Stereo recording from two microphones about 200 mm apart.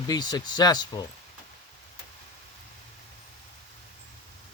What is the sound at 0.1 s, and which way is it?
Speech, 20° left (ahead or behind).